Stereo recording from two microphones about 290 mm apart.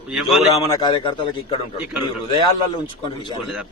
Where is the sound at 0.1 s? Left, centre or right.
Centre.